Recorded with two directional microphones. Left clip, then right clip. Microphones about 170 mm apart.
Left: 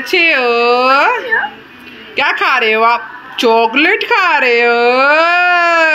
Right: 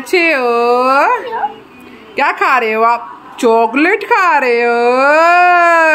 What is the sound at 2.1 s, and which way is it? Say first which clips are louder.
Speech: even; 10° right (ahead or behind).